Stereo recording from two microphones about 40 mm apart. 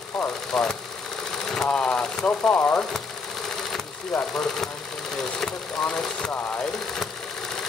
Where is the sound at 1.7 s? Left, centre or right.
Left.